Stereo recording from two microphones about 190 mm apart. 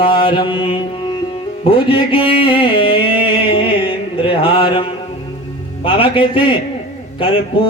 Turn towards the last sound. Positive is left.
turn(degrees=25)  # may be behind; listen again after turning